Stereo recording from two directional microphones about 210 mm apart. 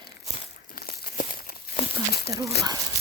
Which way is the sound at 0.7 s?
45° left (ahead or behind).